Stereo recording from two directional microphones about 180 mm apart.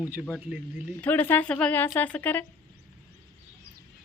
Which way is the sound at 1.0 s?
10° left (ahead or behind).